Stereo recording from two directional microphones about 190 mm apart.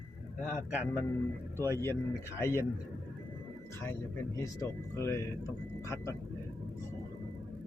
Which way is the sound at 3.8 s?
15° left (ahead or behind).